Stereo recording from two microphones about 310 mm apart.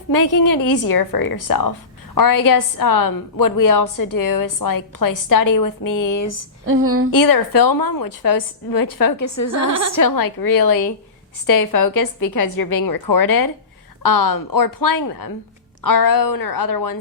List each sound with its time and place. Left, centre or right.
0.1 s a woman's voice: left
6.7 s speech: right
7.1 s a woman's voice: left